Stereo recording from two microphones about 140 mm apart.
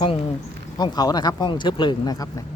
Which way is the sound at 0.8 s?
30° left (ahead or behind).